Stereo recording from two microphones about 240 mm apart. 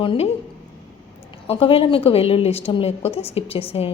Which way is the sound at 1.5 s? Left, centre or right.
Left.